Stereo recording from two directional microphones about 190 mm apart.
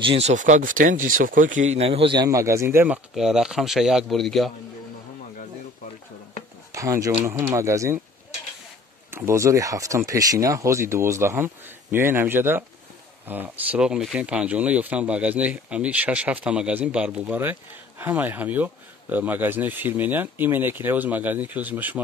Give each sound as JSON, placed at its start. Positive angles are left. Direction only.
{"t": 0.0, "sound": "speech", "side_deg": -30}
{"t": 6.7, "sound": "speech", "side_deg": -15}
{"t": 9.1, "sound": "speech", "side_deg": -15}